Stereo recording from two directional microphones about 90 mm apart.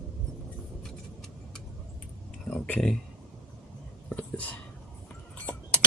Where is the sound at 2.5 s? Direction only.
15° left (ahead or behind).